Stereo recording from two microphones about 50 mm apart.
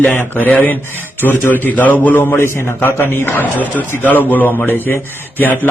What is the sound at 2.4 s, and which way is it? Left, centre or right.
Speech, left.